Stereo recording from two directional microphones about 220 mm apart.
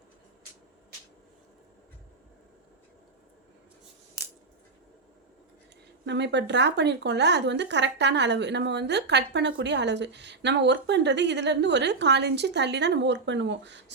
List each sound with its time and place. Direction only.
6.1 s speech: 50° right (ahead or behind)